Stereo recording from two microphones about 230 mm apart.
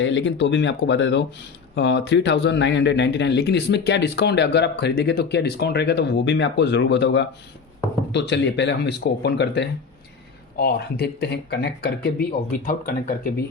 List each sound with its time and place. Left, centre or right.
0.0 s speech: left